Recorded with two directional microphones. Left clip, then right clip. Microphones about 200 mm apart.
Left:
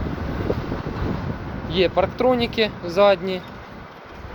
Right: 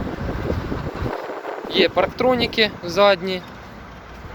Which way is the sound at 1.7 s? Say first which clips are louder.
Right 2 dB; 10° right (ahead or behind).